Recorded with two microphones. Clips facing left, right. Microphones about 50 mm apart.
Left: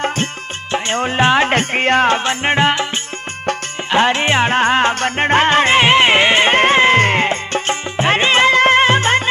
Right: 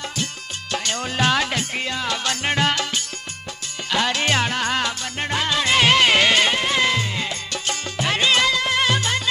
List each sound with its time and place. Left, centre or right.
0.7 s speech: left
1.5 s music: left
2.1 s music: left
3.9 s music: left
6.5 s music: left